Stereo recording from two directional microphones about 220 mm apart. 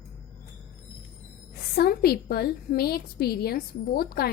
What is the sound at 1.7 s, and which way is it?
A woman's voice, 45° left (ahead or behind).